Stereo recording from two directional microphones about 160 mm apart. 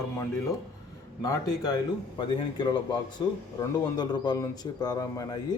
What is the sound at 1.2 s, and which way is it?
Speech, 20° left (ahead or behind).